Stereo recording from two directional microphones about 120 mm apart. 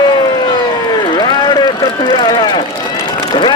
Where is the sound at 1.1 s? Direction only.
40° left (ahead or behind).